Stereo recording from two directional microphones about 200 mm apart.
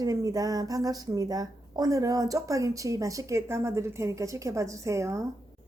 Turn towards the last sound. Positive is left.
turn(degrees=-15)  # may be behind; listen again after turning